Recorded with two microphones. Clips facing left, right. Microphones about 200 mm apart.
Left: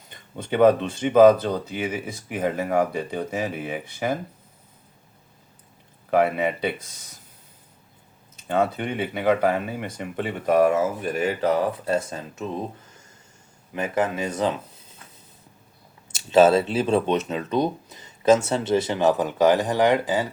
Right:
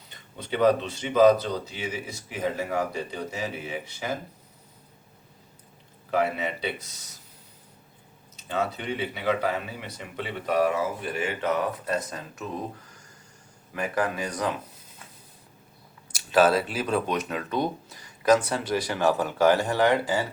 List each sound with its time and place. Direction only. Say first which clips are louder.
0.1 s speech: left 5 dB; 50° left (ahead or behind)
6.1 s speech: left 5 dB; 55° left (ahead or behind)
8.4 s speech: left 6 dB; 55° left (ahead or behind); by 12.6 s 25° left (ahead or behind)
13.7 s speech: left 3 dB; 20° left (ahead or behind)
16.1 s speech: left 5 dB; 25° left (ahead or behind)